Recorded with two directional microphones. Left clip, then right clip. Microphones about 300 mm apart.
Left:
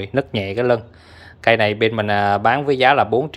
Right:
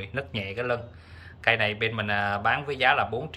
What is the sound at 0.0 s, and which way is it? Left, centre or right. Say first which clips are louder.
Speech: left 11 dB; left.